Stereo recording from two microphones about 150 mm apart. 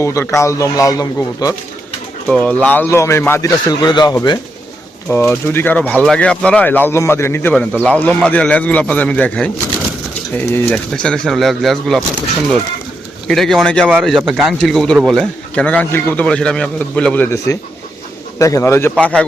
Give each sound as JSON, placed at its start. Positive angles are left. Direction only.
{"t": 0.0, "sound": "speech", "side_deg": 20}
{"t": 2.3, "sound": "speech", "side_deg": 10}
{"t": 5.1, "sound": "speech", "side_deg": 15}
{"t": 13.2, "sound": "speech", "side_deg": 0}
{"t": 17.3, "sound": "speech", "side_deg": 20}